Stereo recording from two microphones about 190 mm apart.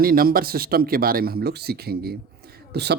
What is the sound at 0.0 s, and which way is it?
Speech, 50° right (ahead or behind).